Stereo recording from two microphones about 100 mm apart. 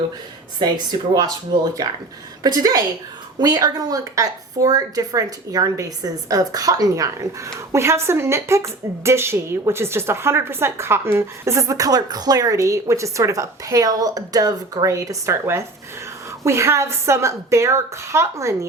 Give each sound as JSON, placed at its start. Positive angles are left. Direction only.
{"t": 0.6, "sound": "speech", "side_deg": -45}
{"t": 2.4, "sound": "a woman's voice", "side_deg": -40}